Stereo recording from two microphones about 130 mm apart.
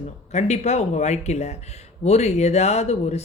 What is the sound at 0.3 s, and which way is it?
Speech, 60° left (ahead or behind).